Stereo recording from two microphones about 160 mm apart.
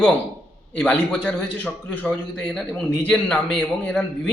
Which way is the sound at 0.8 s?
10° left (ahead or behind).